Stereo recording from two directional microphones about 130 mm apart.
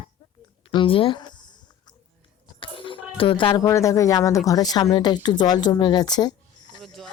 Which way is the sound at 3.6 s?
25° left (ahead or behind).